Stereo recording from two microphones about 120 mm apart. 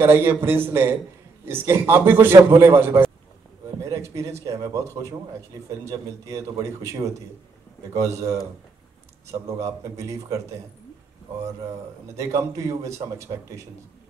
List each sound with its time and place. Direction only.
0.0 s a man's voice: 20° right (ahead or behind)
12.2 s a man's voice: 25° right (ahead or behind)